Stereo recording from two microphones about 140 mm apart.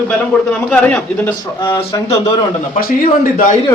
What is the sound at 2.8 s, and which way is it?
Speech, 90° left.